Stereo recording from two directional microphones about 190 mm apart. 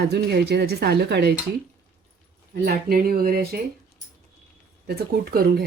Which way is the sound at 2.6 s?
50° right (ahead or behind).